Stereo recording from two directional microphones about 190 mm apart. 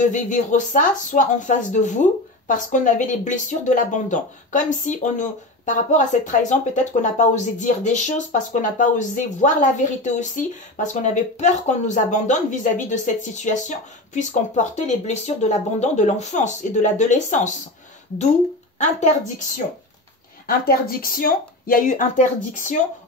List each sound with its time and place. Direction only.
0.0 s speech: 40° left (ahead or behind)
18.8 s speech: 40° left (ahead or behind)
20.4 s speech: 50° left (ahead or behind)